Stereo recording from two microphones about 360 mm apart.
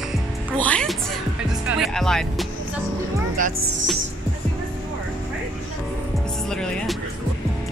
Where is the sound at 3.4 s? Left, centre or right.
Right.